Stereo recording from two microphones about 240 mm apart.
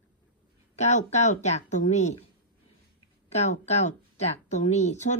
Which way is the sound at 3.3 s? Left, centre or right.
Left.